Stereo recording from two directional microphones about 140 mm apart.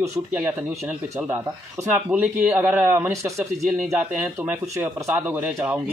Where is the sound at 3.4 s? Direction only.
5° right (ahead or behind).